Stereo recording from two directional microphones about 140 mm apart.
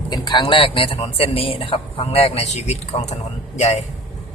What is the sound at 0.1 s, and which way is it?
A man's voice, 30° left (ahead or behind).